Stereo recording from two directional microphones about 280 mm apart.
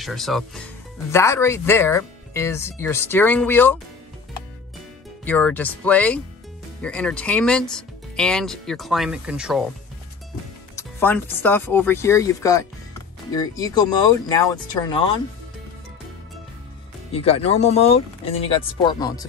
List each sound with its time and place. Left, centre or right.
0.0 s speech: centre
5.2 s speech: centre
10.8 s speech: centre
17.1 s speech: left